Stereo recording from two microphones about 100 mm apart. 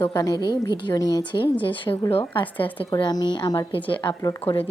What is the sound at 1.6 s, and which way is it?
A woman's voice, 55° left (ahead or behind).